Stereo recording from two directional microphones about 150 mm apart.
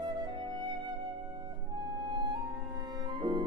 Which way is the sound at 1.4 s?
30° right (ahead or behind).